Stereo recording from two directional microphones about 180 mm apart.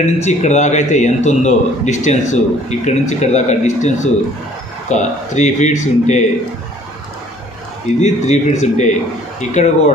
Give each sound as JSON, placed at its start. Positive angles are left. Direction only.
{"t": 0.2, "sound": "a man's voice", "side_deg": 40}
{"t": 8.0, "sound": "a man's voice", "side_deg": 40}